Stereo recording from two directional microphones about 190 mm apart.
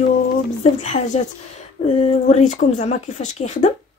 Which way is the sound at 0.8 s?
40° left (ahead or behind).